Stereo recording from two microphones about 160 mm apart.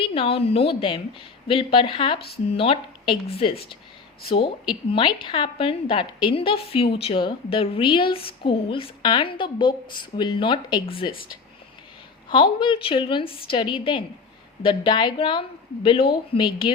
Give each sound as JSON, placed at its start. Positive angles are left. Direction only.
{"t": 0.0, "sound": "a woman's voice", "side_deg": 35}
{"t": 12.3, "sound": "a woman's voice", "side_deg": 30}